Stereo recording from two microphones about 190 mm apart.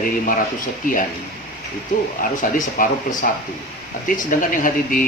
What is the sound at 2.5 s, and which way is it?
Speech, 45° left (ahead or behind).